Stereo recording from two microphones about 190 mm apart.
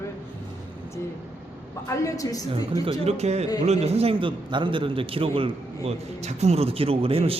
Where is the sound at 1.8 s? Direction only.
15° left (ahead or behind).